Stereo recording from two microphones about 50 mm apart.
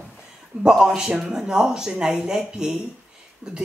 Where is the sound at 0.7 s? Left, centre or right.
Centre.